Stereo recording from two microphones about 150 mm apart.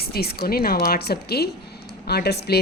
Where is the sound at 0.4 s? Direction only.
85° left.